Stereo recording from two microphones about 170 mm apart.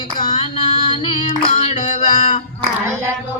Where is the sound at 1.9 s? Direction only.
50° left (ahead or behind).